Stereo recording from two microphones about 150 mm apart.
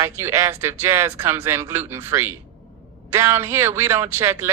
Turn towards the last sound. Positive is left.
turn(degrees=-15)  # may be behind; listen again after turning